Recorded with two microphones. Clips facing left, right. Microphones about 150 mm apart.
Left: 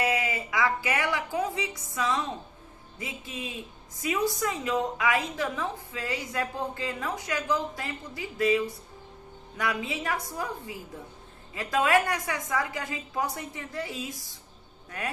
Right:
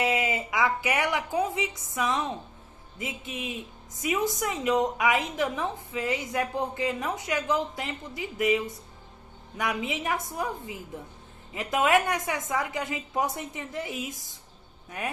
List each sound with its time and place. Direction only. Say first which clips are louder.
0.0 s a woman's voice: right 1 dB; 20° right (ahead or behind)